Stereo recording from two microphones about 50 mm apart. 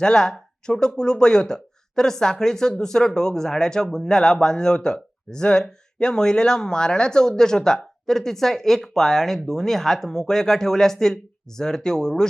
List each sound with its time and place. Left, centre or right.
0.0 s speech: centre